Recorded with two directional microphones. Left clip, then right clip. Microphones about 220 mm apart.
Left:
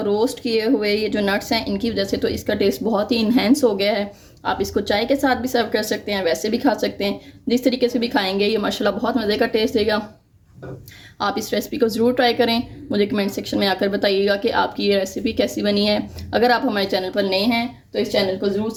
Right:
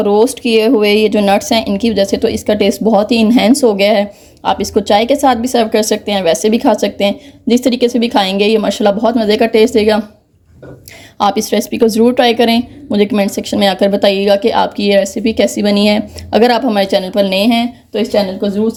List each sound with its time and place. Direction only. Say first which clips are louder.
0.0 s speech: right 9 dB; 25° right (ahead or behind)
11.2 s speech: right 9 dB; 30° right (ahead or behind)